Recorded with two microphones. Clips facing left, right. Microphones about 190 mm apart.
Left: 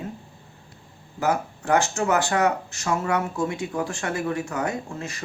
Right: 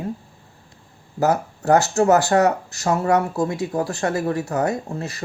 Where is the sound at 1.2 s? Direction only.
40° right (ahead or behind).